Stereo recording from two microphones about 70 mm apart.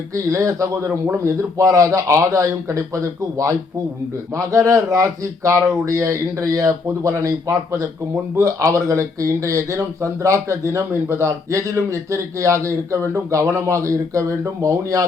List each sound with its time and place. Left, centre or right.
0.1 s speech: right